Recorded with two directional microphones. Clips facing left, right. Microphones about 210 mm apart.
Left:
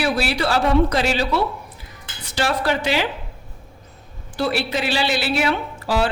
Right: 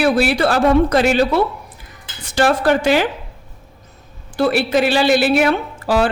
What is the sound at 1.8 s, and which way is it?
Dishes, 50° right (ahead or behind).